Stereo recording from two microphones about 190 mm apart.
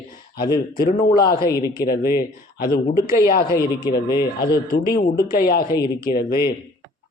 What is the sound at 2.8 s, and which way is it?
Speech, 50° left (ahead or behind).